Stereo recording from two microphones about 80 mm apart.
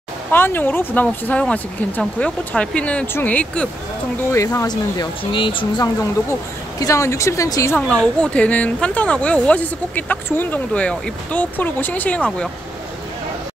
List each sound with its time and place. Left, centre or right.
0.3 s speech: left
4.6 s speech: left
6.8 s speech: left
7.7 s speech: centre